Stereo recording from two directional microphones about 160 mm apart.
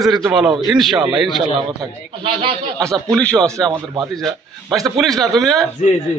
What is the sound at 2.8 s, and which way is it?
Speech, 5° left (ahead or behind).